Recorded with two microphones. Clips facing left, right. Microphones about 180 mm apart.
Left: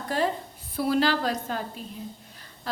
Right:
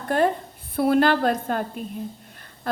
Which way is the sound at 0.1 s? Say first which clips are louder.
Right 6 dB; 55° right (ahead or behind).